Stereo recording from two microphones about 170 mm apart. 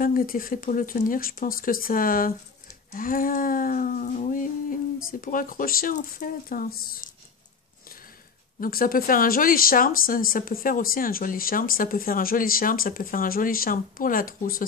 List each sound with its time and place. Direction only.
0.0 s speech: 55° left (ahead or behind)
2.9 s humming: 55° left (ahead or behind)
5.2 s speech: 55° left (ahead or behind)
8.5 s speech: 60° left (ahead or behind)